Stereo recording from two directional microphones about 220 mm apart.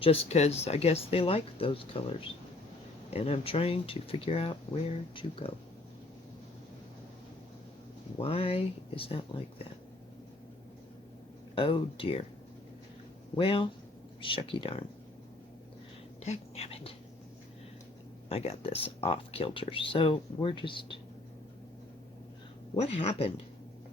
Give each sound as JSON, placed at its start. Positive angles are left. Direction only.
{"t": 0.0, "sound": "speech", "side_deg": 25}
{"t": 8.2, "sound": "speech", "side_deg": 25}
{"t": 11.5, "sound": "speech", "side_deg": 25}
{"t": 13.3, "sound": "speech", "side_deg": 25}
{"t": 16.2, "sound": "speech", "side_deg": 30}
{"t": 18.3, "sound": "speech", "side_deg": 25}
{"t": 22.7, "sound": "speech", "side_deg": 25}